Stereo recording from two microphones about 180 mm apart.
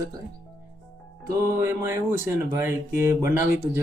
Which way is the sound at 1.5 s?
15° right (ahead or behind).